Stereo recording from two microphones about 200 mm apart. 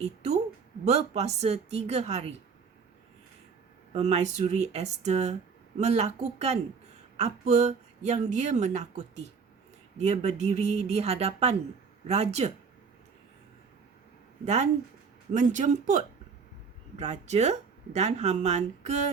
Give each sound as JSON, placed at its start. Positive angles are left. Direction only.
{"t": 0.0, "sound": "speech", "side_deg": -35}
{"t": 3.9, "sound": "speech", "side_deg": -35}
{"t": 14.4, "sound": "speech", "side_deg": -35}